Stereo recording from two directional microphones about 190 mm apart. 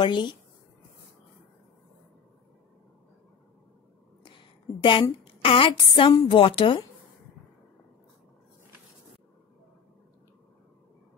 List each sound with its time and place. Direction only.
0.0 s a woman's voice: 25° left (ahead or behind)
4.2 s a sound: 25° left (ahead or behind)
5.2 s a woman's voice: 30° left (ahead or behind)